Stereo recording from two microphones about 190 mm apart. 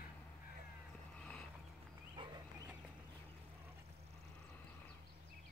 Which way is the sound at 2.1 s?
20° right (ahead or behind).